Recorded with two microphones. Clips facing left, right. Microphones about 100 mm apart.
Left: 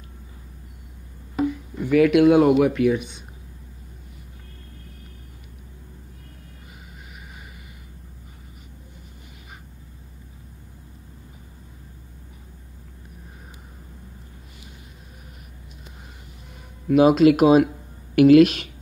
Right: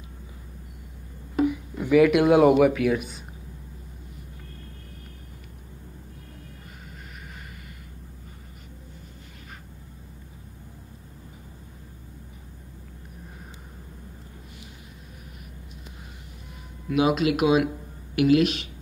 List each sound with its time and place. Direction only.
1.5 s speech: 5° right (ahead or behind)
16.9 s speech: 40° left (ahead or behind)